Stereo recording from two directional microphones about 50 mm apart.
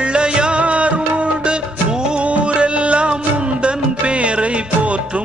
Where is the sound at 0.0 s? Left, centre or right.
Centre.